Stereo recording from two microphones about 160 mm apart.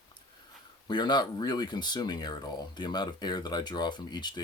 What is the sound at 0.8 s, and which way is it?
Speech, 25° left (ahead or behind).